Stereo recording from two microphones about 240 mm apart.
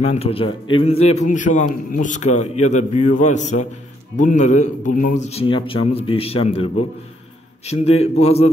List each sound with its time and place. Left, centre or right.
0.0 s a man's voice: left